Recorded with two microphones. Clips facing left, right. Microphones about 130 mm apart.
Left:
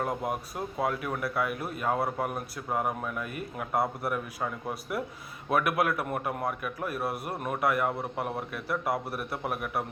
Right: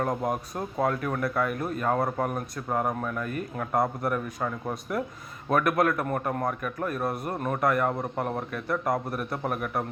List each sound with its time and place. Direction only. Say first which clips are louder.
0.1 s speech: right 3 dB; 40° right (ahead or behind)
0.8 s a man's voice: right 4 dB; 10° left (ahead or behind)